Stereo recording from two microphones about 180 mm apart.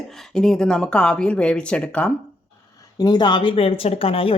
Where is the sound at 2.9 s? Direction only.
20° left (ahead or behind).